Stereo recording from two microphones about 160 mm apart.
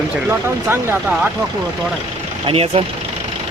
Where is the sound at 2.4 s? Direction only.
35° right (ahead or behind).